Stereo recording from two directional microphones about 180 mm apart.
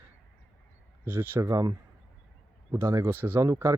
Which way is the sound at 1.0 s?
10° right (ahead or behind).